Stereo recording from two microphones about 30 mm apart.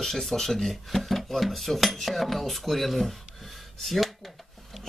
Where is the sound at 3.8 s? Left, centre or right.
Centre.